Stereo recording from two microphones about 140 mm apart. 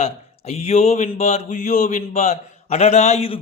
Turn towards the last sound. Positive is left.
turn(degrees=45)  # may be behind; listen again after turning